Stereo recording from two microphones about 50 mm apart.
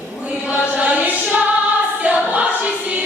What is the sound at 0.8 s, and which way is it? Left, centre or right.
Chant, right.